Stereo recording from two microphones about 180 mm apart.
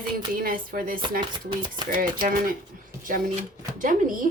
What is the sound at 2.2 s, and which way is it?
Speech, 50° right (ahead or behind).